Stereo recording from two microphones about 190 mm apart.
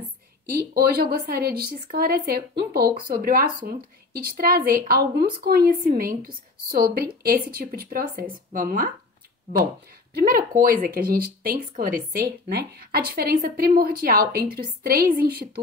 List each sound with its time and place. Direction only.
0.6 s a woman's voice: 55° right (ahead or behind)
10.1 s a woman's voice: 50° right (ahead or behind)